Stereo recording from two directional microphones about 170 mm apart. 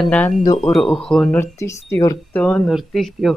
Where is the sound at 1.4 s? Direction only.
15° left (ahead or behind).